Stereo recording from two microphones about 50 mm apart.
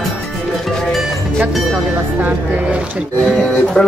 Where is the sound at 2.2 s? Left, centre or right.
Right.